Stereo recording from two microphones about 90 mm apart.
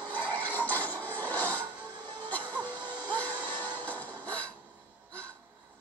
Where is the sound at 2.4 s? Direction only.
55° right (ahead or behind).